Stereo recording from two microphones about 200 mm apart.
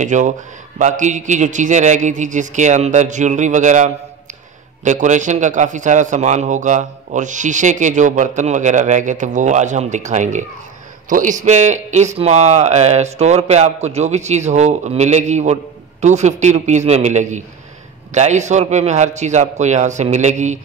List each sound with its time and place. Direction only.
0.0 s speech: 35° right (ahead or behind)